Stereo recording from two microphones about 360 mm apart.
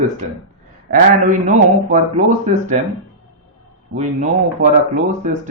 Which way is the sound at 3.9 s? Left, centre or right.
Centre.